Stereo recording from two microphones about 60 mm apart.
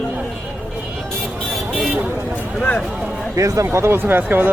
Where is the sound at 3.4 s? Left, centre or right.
Right.